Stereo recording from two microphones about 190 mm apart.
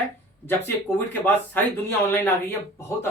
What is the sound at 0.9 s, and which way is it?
Speech, 10° left (ahead or behind).